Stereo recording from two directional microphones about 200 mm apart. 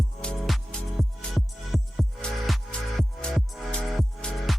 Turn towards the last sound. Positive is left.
turn(degrees=0)  # may be behind; listen again after turning